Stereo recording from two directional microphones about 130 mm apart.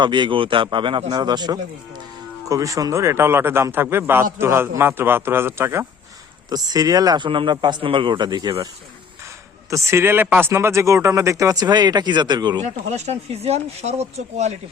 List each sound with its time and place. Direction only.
0.0 s a man's voice: 40° right (ahead or behind); by 5.8 s 20° right (ahead or behind)
6.5 s speech: 30° right (ahead or behind)
9.6 s speech: 25° right (ahead or behind)
12.6 s speech: 60° right (ahead or behind)